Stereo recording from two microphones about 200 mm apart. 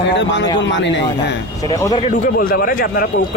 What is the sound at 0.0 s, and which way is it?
Speech, 60° left (ahead or behind).